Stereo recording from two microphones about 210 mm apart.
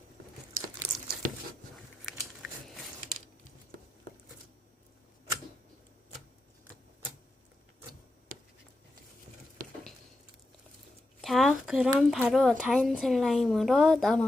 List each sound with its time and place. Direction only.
0.8 s crumpling: 30° right (ahead or behind)
1.7 s biting: centre (ahead or behind)
11.2 s a woman's voice: centre (ahead or behind)